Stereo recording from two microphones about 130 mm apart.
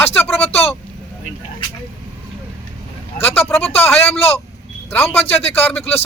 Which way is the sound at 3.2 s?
15° left (ahead or behind).